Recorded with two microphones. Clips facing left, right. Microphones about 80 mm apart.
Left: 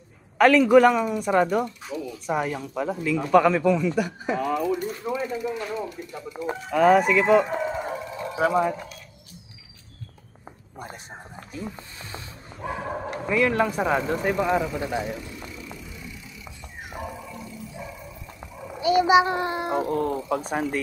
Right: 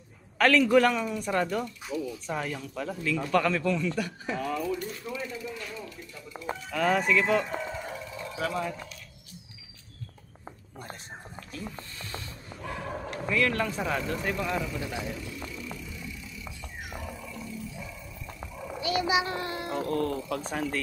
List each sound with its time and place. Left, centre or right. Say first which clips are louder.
0.4 s a man's voice: left 6 dB; centre
1.9 s speech: left 1 dB; centre
2.2 s a man's voice: left 7 dB; centre
4.8 s speech: left 8 dB; left
6.7 s a man's voice: left 8 dB; centre
7.4 s a sound: left 7 dB; left
8.4 s speech: left 10 dB; left
11.5 s a sound: left 4 dB; centre
12.5 s dog: left 6 dB; left
13.3 s speech: left 5 dB; centre
17.0 s a sound: left 4 dB; left
18.8 s a child's voice: left 9 dB; left